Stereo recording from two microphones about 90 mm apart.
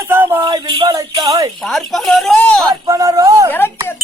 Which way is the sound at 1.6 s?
5° left (ahead or behind).